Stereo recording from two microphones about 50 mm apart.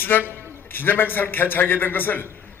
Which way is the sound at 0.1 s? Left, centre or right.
Left.